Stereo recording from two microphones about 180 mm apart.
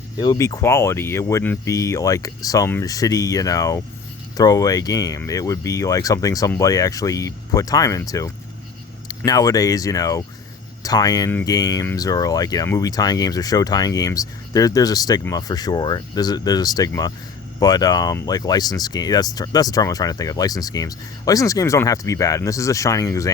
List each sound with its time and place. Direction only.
0.2 s speech: 20° left (ahead or behind)